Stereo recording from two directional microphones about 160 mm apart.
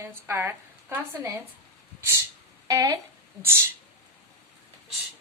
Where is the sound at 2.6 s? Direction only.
20° right (ahead or behind).